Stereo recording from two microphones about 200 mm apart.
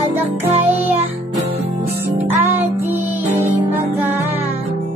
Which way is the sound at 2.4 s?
10° right (ahead or behind).